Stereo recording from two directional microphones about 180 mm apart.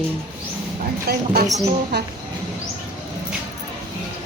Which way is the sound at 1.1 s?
60° right (ahead or behind).